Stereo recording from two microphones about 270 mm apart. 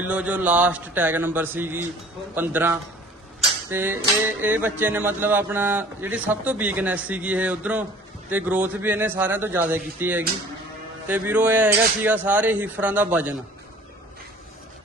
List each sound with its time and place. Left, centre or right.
0.0 s speech: centre